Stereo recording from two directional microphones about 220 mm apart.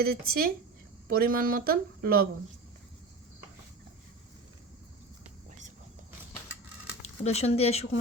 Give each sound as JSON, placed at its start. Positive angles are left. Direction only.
{"t": 0.0, "sound": "speech", "side_deg": -45}
{"t": 7.3, "sound": "speech", "side_deg": 30}